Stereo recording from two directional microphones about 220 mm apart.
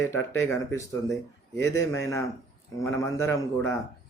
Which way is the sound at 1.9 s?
15° left (ahead or behind).